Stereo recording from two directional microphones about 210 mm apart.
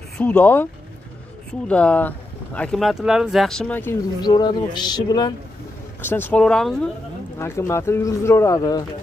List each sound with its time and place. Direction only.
0.2 s speech: 5° left (ahead or behind)
4.2 s speech: 20° left (ahead or behind)